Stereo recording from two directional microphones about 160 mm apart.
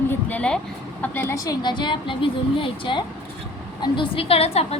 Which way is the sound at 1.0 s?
15° left (ahead or behind).